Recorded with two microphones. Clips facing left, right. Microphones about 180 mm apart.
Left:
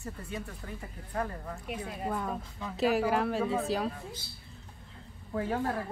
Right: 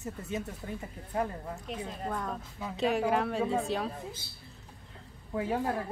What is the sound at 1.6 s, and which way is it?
A woman's voice, 10° left (ahead or behind).